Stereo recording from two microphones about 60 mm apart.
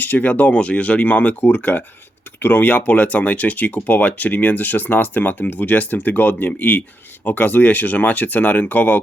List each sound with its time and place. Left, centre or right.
0.0 s speech: left